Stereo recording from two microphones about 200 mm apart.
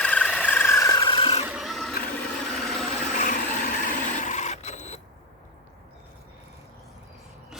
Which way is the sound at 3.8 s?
40° left (ahead or behind).